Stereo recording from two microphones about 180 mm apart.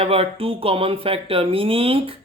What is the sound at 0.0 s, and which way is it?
Speech, 30° right (ahead or behind).